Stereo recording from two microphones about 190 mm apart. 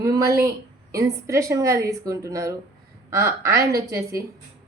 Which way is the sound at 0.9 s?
15° right (ahead or behind).